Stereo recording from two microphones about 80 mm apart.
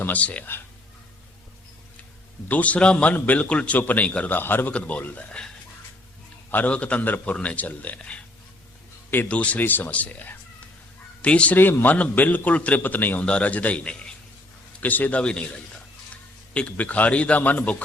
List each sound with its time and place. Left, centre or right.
0.0 s a man's voice: centre
2.5 s a man's voice: centre
6.5 s a man's voice: centre